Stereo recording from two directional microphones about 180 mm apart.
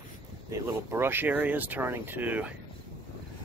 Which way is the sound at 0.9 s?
10° right (ahead or behind).